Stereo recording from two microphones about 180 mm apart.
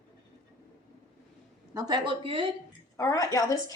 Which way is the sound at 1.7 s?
20° right (ahead or behind).